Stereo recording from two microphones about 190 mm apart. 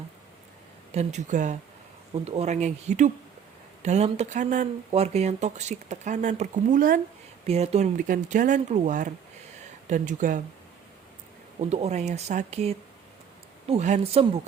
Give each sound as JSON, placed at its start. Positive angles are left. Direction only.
{"t": 0.9, "sound": "speech", "side_deg": -40}
{"t": 7.4, "sound": "speech", "side_deg": -35}
{"t": 11.6, "sound": "speech", "side_deg": -35}